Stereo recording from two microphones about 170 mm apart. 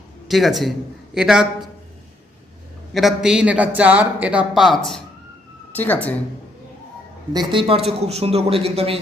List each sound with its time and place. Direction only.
0.3 s a man's voice: centre (ahead or behind)
2.9 s a man's voice: centre (ahead or behind)
5.7 s speech: 10° left (ahead or behind)
7.3 s speech: 30° right (ahead or behind)